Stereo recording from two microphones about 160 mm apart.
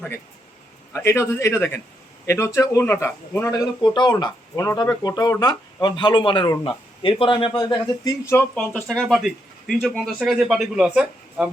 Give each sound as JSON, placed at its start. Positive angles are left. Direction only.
{"t": 0.9, "sound": "a man's voice", "side_deg": 15}
{"t": 3.8, "sound": "speech", "side_deg": 30}
{"t": 8.5, "sound": "speech", "side_deg": 5}